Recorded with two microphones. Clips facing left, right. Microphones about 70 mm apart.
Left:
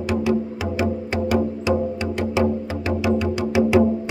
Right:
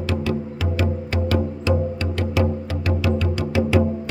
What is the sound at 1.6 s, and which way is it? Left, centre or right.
Music, centre.